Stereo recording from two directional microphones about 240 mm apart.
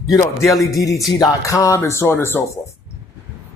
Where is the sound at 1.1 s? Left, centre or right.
Centre.